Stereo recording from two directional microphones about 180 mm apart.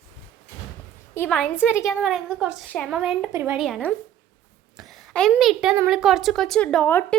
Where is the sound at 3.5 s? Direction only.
Centre (ahead or behind).